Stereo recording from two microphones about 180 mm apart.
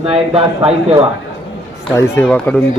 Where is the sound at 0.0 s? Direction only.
30° right (ahead or behind).